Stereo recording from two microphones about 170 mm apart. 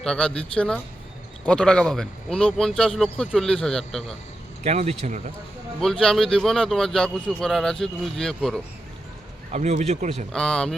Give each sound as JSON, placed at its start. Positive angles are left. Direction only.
{"t": 0.0, "sound": "a man's voice", "side_deg": 5}
{"t": 4.6, "sound": "speech", "side_deg": -40}
{"t": 5.8, "sound": "a man's voice", "side_deg": 5}
{"t": 9.5, "sound": "speech", "side_deg": -40}
{"t": 10.3, "sound": "a man's voice", "side_deg": 5}